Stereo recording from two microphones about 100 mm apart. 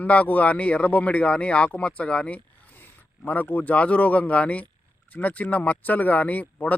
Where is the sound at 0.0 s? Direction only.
15° left (ahead or behind).